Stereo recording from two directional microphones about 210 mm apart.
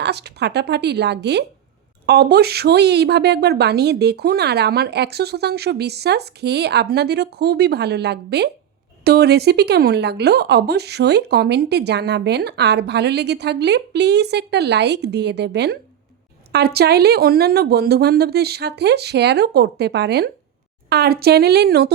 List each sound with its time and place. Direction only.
0.0 s speech: 50° right (ahead or behind)